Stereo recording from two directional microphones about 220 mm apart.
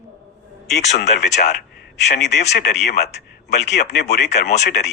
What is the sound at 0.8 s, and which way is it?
Speech, 30° left (ahead or behind).